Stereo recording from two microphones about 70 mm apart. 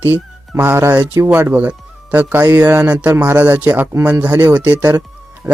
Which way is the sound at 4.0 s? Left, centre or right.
Centre.